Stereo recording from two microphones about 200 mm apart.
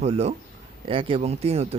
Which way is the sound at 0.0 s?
30° right (ahead or behind).